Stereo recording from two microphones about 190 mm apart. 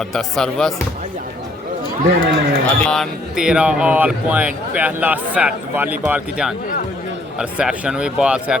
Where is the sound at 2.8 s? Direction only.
5° left (ahead or behind).